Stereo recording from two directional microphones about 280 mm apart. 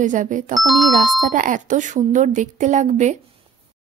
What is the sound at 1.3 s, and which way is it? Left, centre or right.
Speech, right.